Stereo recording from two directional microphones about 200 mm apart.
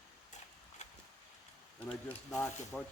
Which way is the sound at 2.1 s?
5° left (ahead or behind).